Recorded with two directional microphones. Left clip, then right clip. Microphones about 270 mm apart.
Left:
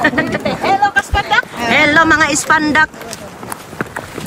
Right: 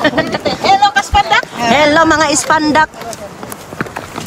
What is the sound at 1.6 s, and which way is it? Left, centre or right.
Speech, centre.